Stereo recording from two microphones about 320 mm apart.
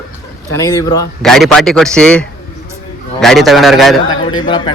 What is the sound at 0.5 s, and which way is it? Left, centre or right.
Speech, centre.